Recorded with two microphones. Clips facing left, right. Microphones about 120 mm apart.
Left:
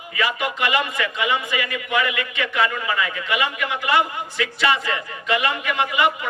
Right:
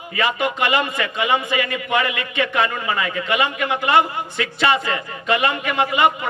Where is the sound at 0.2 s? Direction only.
25° right (ahead or behind).